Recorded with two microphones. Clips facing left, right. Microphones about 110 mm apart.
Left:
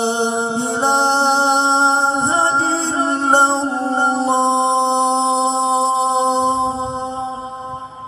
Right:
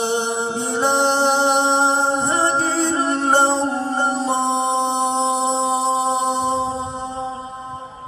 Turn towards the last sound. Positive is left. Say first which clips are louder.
# left 4 dB
turn(degrees=20)  # may be behind; listen again after turning